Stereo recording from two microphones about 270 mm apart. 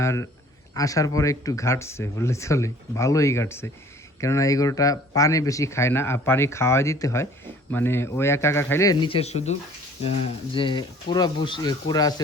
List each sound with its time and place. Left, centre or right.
0.0 s speech: centre